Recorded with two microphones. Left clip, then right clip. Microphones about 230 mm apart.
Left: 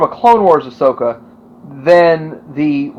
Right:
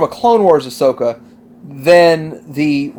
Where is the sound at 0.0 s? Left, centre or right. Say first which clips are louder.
Left 2 dB; right.